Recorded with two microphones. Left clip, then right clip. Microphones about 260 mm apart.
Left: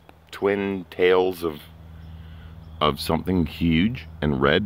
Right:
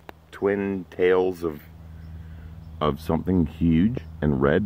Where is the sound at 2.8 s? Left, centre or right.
Centre.